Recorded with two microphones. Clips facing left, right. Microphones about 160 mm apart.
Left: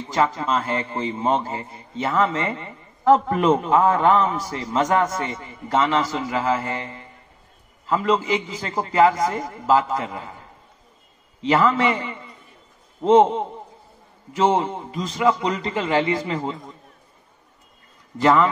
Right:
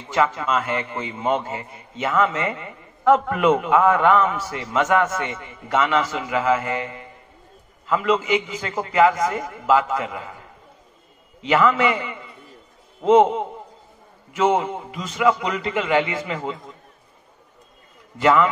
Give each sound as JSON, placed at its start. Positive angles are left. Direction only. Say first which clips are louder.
{"t": 0.1, "sound": "a man's voice", "louder": "right 1 dB", "side_deg": 35}
{"t": 11.4, "sound": "a man's voice", "louder": "even", "side_deg": 35}
{"t": 18.1, "sound": "a man's voice", "louder": "even", "side_deg": 35}